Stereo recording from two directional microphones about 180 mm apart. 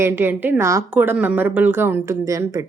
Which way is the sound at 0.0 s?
10° right (ahead or behind).